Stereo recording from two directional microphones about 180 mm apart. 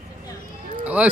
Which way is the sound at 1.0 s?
10° right (ahead or behind).